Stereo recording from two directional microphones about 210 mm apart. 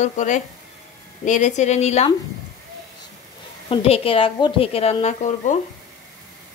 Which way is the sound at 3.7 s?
25° left (ahead or behind).